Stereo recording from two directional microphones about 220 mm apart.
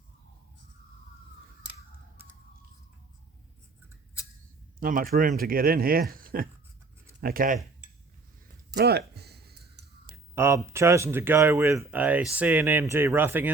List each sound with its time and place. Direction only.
4.8 s speech: 40° right (ahead or behind)
8.7 s a sound: 45° right (ahead or behind)
10.3 s speech: 10° right (ahead or behind)